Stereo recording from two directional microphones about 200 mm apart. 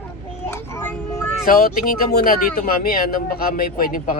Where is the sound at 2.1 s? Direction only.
45° left (ahead or behind).